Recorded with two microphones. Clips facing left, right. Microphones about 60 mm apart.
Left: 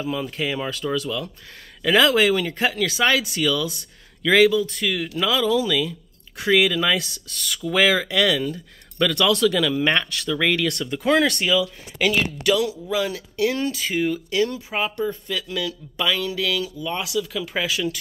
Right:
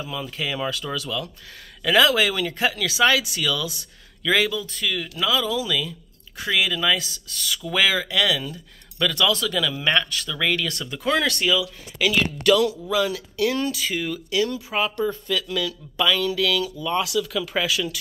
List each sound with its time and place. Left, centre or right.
0.0 s speech: left
9.3 s speech: left
9.8 s speech: left
15.0 s speech: left